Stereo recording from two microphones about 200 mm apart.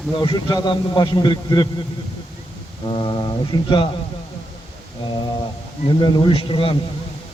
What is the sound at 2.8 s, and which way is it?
A man's voice, 20° left (ahead or behind).